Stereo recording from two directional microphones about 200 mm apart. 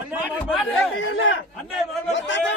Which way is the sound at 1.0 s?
70° left (ahead or behind).